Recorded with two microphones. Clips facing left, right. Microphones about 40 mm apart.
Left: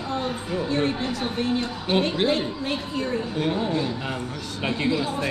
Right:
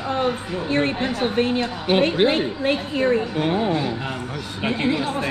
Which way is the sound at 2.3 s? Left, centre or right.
Right.